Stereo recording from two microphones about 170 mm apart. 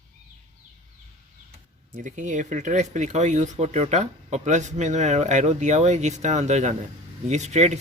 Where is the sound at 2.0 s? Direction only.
45° right (ahead or behind).